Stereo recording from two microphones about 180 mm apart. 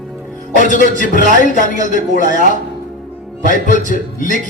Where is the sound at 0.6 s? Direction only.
45° left (ahead or behind).